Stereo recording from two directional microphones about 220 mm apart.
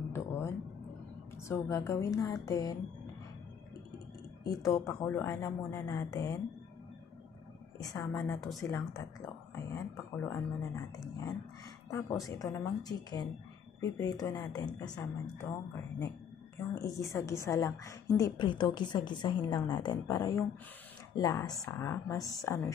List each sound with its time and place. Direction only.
0.1 s a sound: 10° left (ahead or behind)
1.5 s a woman's voice: 15° left (ahead or behind)
4.6 s a woman's voice: 15° left (ahead or behind)
7.9 s a woman's voice: 10° left (ahead or behind)
8.6 s a woman's voice: 15° left (ahead or behind)